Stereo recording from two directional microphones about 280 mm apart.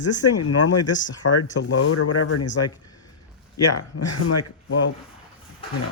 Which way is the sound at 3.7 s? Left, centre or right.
Left.